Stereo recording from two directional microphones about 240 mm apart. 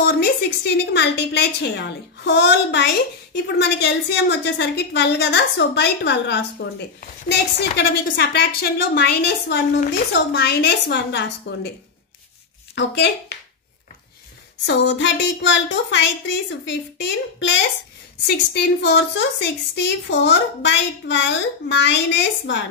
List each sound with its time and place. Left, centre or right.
0.0 s a woman's voice: left
12.7 s a woman's voice: left
14.7 s a woman's voice: left